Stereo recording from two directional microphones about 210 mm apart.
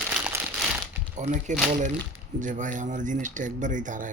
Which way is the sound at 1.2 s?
35° right (ahead or behind).